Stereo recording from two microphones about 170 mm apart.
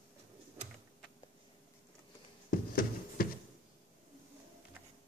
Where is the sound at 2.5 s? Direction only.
60° left (ahead or behind).